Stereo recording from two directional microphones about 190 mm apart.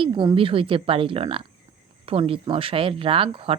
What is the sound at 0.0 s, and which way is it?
Speech, 25° right (ahead or behind).